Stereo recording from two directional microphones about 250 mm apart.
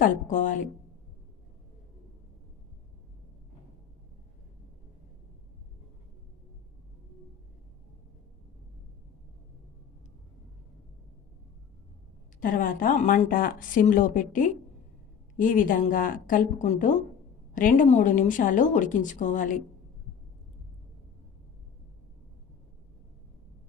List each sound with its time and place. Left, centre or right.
0.0 s speech: left
12.4 s speech: left